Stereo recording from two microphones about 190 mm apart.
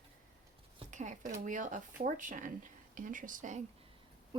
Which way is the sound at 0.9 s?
40° right (ahead or behind).